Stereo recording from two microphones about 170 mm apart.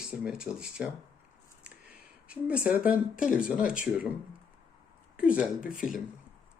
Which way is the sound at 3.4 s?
5° right (ahead or behind).